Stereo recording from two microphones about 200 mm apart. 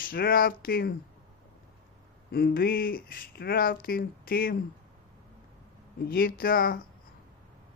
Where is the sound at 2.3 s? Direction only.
50° left (ahead or behind).